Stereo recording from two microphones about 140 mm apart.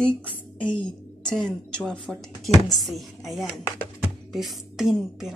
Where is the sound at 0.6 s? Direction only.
35° left (ahead or behind).